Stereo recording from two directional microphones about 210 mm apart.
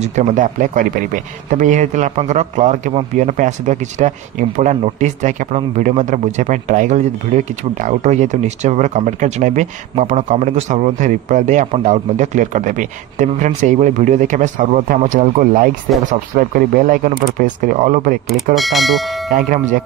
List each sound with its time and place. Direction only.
0.0 s speech: 35° right (ahead or behind)
18.3 s speech: centre (ahead or behind)
19.3 s speech: 40° right (ahead or behind)